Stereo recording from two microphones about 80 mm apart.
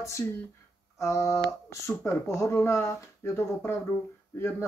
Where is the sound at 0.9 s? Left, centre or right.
Left.